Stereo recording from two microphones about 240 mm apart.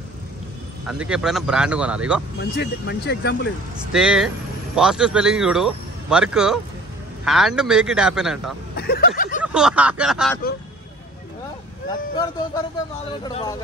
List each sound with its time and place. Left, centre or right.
0.8 s speech: centre
2.5 s speech: left
3.9 s speech: centre
8.7 s speech: left
9.4 s speech: centre
13.2 s speech: centre